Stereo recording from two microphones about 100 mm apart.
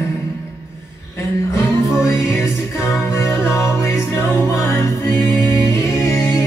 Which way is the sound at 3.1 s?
30° left (ahead or behind).